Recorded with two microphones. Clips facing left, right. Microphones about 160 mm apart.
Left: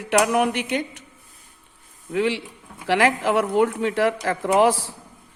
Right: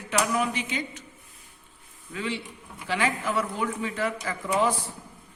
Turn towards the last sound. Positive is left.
turn(degrees=90)